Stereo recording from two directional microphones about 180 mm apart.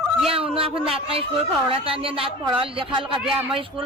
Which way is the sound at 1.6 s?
30° right (ahead or behind).